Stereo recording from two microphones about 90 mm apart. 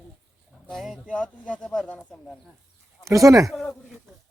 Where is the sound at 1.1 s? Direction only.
15° left (ahead or behind).